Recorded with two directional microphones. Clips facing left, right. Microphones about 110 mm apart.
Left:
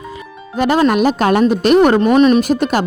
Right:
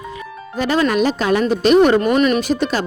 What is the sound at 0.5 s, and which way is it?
A woman's voice, 55° left (ahead or behind).